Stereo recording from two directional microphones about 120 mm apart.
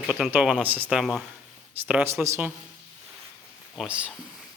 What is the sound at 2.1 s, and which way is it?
Speech, 25° right (ahead or behind).